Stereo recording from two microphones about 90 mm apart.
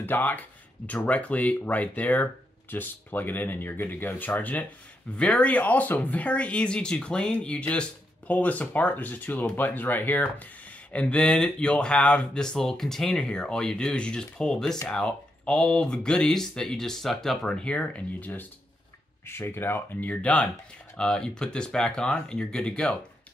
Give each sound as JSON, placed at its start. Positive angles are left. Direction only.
{"t": 0.0, "sound": "speech", "side_deg": 20}